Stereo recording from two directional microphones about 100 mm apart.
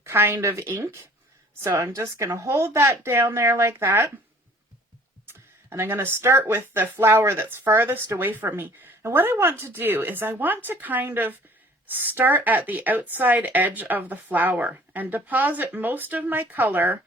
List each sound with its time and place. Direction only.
0.0 s speech: 25° right (ahead or behind)
5.2 s speech: 25° right (ahead or behind)